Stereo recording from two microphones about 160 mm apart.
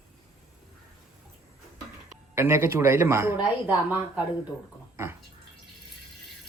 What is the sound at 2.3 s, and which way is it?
A man's voice, 15° right (ahead or behind).